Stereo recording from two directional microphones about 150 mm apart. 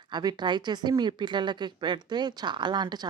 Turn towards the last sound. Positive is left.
turn(degrees=-30)  # may be behind; listen again after turning